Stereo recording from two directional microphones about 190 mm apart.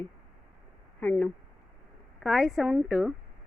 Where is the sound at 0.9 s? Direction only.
5° left (ahead or behind).